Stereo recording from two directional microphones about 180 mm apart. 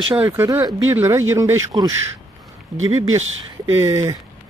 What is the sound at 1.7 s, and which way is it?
Speech, 25° right (ahead or behind).